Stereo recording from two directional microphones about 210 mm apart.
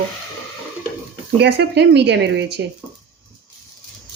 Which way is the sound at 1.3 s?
50° right (ahead or behind).